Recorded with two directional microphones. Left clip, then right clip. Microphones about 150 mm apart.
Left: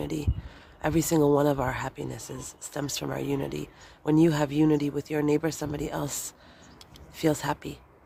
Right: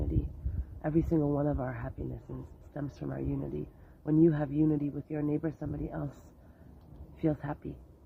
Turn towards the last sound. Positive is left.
turn(degrees=35)  # may be behind; listen again after turning